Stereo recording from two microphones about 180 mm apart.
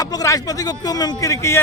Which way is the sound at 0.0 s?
20° left (ahead or behind).